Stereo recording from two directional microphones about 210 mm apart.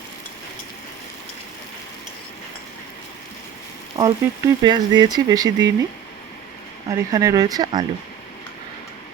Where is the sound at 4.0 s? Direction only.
20° right (ahead or behind).